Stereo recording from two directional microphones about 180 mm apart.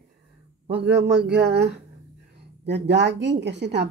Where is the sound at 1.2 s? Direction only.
70° right (ahead or behind).